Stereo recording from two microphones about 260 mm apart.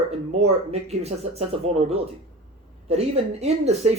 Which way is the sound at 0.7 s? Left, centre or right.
Right.